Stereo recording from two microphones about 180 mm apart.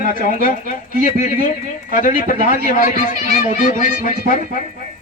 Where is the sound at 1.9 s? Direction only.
50° left (ahead or behind).